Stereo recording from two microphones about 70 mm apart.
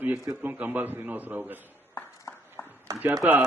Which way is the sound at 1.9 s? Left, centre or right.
Left.